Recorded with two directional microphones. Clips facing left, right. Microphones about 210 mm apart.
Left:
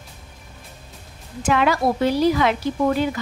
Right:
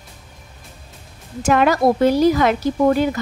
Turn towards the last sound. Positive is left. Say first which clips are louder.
# right 4 dB
turn(degrees=-45)  # may be behind; listen again after turning